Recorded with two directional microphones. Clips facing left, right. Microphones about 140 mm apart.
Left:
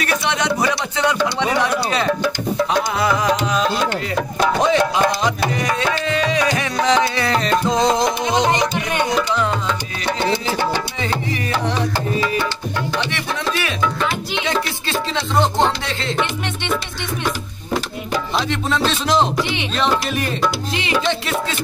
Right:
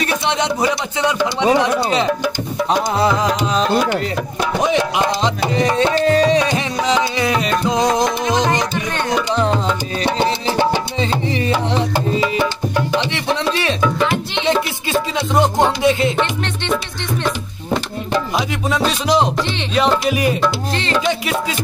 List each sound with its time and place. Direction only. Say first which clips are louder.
0.0 s speech: right 2 dB; 20° right (ahead or behind)
4.6 s speech: right 2 dB; 15° right (ahead or behind)
6.8 s music: left 1 dB; 15° right (ahead or behind)
7.9 s music: right 1 dB; 20° left (ahead or behind)
10.0 s music: right 2 dB; 20° right (ahead or behind)
12.9 s music: right 5 dB; 20° right (ahead or behind)
14.9 s music: right 3 dB; 15° right (ahead or behind)
18.9 s music: right 2 dB; 10° right (ahead or behind)
20.7 s music: right 1 dB; 15° left (ahead or behind)